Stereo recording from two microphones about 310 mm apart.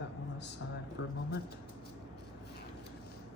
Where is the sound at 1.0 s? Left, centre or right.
Left.